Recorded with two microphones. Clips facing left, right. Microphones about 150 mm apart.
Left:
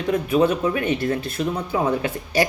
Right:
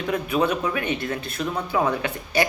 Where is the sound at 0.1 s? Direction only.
35° left (ahead or behind).